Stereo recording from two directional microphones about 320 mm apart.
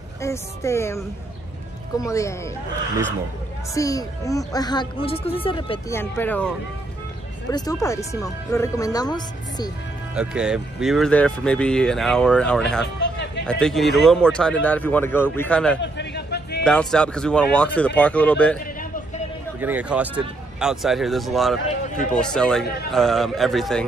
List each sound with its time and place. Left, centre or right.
0.2 s speech: centre
3.7 s speech: centre
7.5 s speech: centre
10.1 s speech: centre
12.8 s a sound: left
13.5 s speech: centre
15.8 s a sound: left
16.6 s speech: centre
19.6 s speech: centre